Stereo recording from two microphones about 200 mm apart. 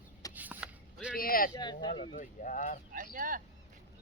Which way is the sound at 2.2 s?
40° left (ahead or behind).